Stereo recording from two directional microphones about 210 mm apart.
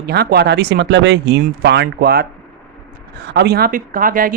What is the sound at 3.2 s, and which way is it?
A woman's voice, 50° right (ahead or behind).